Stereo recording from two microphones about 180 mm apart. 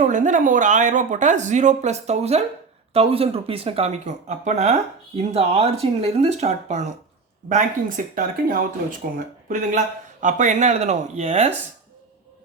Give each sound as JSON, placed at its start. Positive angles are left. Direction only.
{"t": 0.0, "sound": "speech", "side_deg": -45}